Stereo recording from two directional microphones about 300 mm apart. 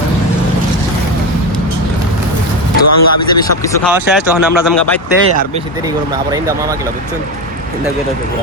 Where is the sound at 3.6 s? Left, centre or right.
Centre.